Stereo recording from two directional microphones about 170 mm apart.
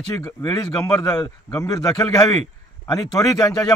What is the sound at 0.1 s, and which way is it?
Speech, 20° left (ahead or behind).